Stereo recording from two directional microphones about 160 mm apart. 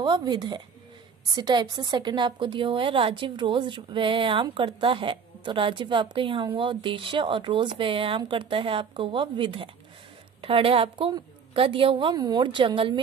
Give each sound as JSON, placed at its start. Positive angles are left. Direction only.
{"t": 0.0, "sound": "a woman's voice", "side_deg": -25}